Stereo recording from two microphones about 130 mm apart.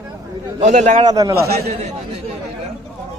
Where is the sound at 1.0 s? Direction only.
30° right (ahead or behind).